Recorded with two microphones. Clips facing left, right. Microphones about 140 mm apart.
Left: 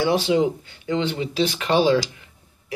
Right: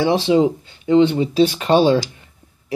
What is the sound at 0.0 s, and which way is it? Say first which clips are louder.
Speech: right 4 dB; 25° right (ahead or behind).